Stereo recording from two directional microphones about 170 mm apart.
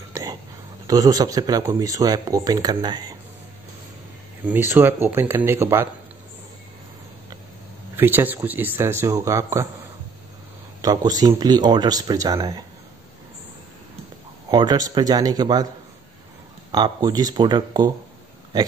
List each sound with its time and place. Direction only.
0.1 s a sound: 20° right (ahead or behind)
0.8 s speech: 20° right (ahead or behind)
4.5 s speech: 10° right (ahead or behind)
7.9 s speech: 10° right (ahead or behind)
10.8 s speech: 20° right (ahead or behind)
14.5 s speech: 25° right (ahead or behind)
16.7 s speech: 25° right (ahead or behind)